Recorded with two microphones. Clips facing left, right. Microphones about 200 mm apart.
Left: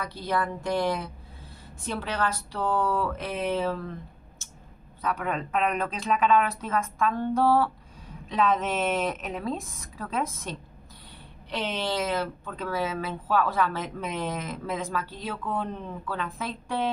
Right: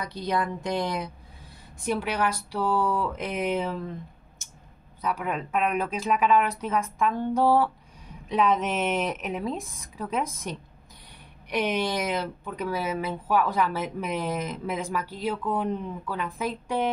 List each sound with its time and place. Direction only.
0.0 s speech: 20° right (ahead or behind)
5.0 s speech: 5° right (ahead or behind)
11.5 s speech: 15° right (ahead or behind)